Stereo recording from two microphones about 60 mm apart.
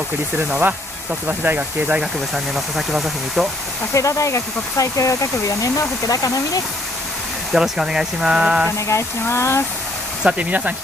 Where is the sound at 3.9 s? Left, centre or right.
Left.